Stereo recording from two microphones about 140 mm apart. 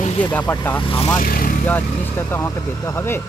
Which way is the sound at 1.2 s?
80° left.